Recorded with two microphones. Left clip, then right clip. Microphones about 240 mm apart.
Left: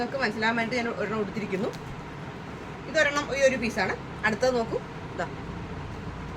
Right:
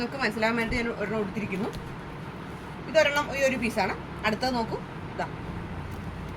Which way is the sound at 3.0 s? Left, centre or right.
Centre.